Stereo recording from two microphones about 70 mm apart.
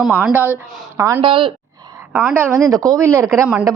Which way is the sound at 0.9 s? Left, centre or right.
Right.